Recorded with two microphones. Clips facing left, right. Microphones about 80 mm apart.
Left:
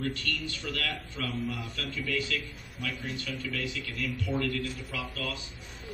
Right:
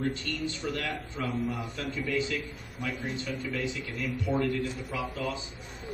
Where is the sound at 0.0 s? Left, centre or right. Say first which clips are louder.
Right 2 dB; right.